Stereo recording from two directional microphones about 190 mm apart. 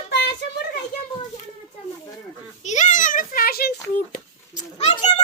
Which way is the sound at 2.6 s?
40° left (ahead or behind).